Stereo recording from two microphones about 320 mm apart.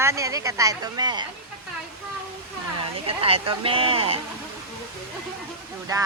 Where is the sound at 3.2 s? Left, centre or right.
Centre.